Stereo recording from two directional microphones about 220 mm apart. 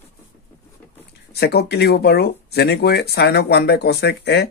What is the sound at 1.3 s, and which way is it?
Speech, 50° left (ahead or behind).